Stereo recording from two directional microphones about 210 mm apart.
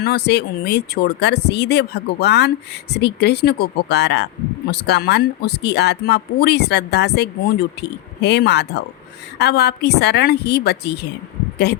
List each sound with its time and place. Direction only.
0.0 s speech: 50° left (ahead or behind)